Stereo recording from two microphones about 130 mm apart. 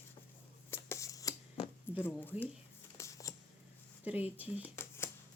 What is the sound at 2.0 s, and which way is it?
Speech, 15° left (ahead or behind).